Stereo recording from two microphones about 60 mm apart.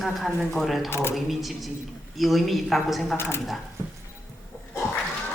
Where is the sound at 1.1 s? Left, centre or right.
Centre.